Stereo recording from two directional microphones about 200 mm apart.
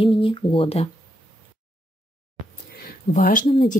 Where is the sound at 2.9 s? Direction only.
45° left (ahead or behind).